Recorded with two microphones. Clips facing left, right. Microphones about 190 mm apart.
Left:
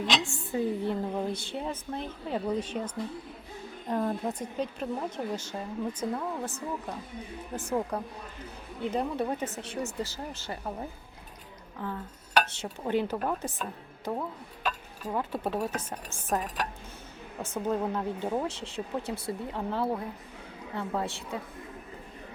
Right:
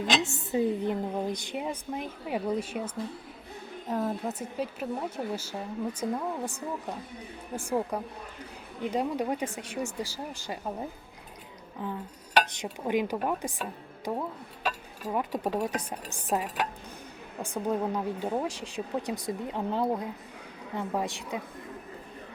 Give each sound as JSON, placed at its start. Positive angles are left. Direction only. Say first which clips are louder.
{"t": 0.3, "sound": "a woman's voice", "louder": "right 2 dB", "side_deg": -20}